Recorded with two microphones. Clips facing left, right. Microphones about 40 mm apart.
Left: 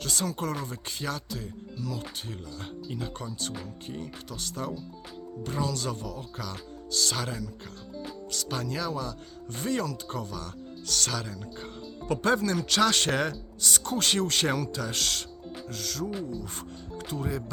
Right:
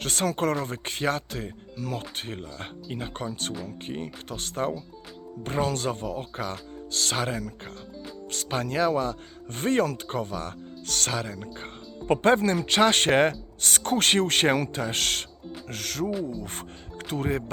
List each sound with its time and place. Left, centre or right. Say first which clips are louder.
0.0 s speech: right 5 dB; right